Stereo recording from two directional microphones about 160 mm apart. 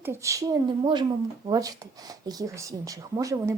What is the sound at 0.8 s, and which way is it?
Speech, 30° right (ahead or behind).